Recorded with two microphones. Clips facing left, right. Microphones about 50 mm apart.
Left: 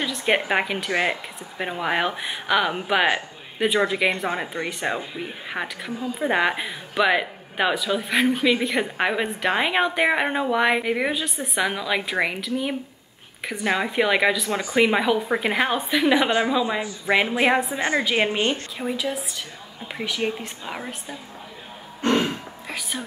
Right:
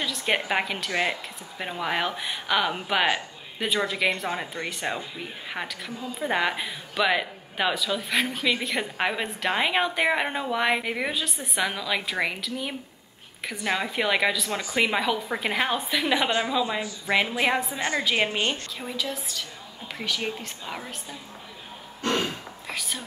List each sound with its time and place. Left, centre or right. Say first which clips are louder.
0.0 s speech: left 4 dB; centre
16.3 s speech: left 4 dB; left
16.5 s speech: left 3 dB; centre
22.0 s a sound: left 5 dB; left
22.7 s speech: left 2 dB; centre